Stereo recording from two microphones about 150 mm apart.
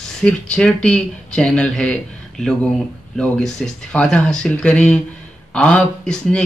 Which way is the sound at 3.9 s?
5° left (ahead or behind).